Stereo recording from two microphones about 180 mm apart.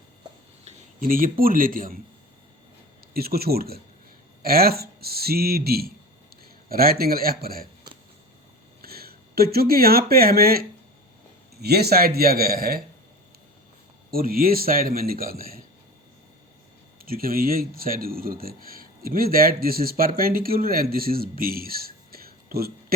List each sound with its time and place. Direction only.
0.9 s speech: 50° right (ahead or behind)
3.1 s a man's voice: 60° right (ahead or behind)
8.8 s speech: 60° right (ahead or behind)
14.1 s speech: 55° right (ahead or behind)
17.1 s speech: 55° right (ahead or behind)